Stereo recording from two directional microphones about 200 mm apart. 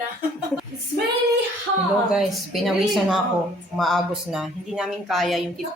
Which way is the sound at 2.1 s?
Centre (ahead or behind).